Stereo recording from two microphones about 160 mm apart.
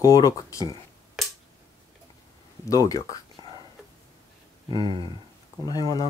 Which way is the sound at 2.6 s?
20° left (ahead or behind).